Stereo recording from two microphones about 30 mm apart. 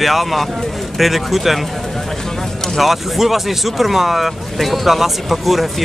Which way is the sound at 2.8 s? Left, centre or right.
Centre.